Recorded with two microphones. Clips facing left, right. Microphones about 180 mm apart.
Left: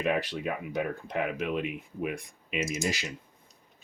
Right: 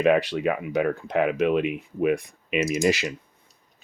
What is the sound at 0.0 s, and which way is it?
Speech, 75° right (ahead or behind).